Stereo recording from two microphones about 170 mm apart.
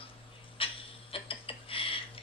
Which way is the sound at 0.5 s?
35° left (ahead or behind).